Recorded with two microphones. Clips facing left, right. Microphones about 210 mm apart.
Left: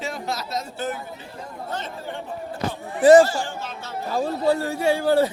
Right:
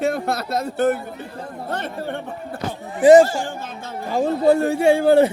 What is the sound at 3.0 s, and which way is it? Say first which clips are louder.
Speech: right 2 dB; 20° right (ahead or behind).